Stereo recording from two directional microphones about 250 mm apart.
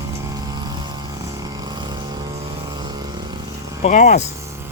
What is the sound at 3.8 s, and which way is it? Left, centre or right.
Speech, left.